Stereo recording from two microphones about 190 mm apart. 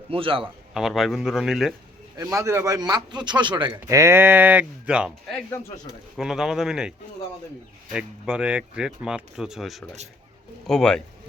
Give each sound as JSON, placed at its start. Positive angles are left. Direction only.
{"t": 0.1, "sound": "speech", "side_deg": -30}
{"t": 0.7, "sound": "speech", "side_deg": 0}
{"t": 2.1, "sound": "speech", "side_deg": -20}
{"t": 7.9, "sound": "speech", "side_deg": -5}